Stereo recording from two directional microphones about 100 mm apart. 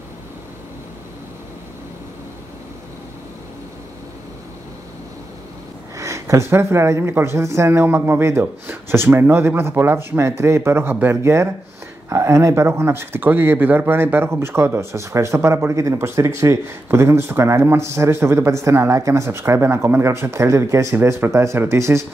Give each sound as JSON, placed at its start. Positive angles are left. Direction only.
{"t": 5.9, "sound": "speech", "side_deg": -30}